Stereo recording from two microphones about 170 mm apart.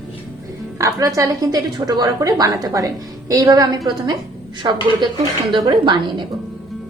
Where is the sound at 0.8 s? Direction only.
20° right (ahead or behind).